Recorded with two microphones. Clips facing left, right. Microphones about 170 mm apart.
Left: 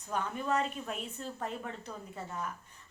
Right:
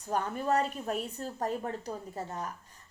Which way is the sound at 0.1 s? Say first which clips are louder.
Right 3 dB; 40° right (ahead or behind).